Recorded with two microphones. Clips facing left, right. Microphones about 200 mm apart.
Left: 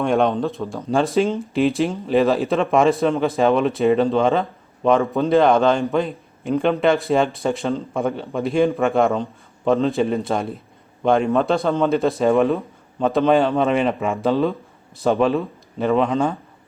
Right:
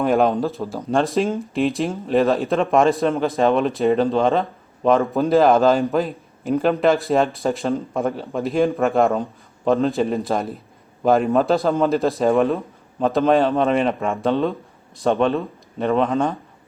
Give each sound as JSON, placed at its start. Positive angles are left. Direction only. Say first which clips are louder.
{"t": 0.0, "sound": "speech", "louder": "right 1 dB", "side_deg": -5}